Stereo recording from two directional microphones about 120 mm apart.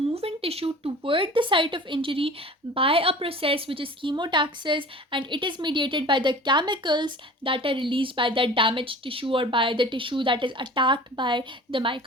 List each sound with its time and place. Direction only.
0.1 s a woman's voice: 55° right (ahead or behind)